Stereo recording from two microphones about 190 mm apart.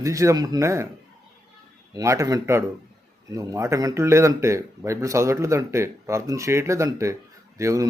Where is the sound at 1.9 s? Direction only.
15° right (ahead or behind).